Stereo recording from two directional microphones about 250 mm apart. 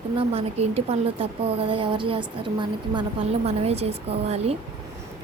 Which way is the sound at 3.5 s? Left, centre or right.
Right.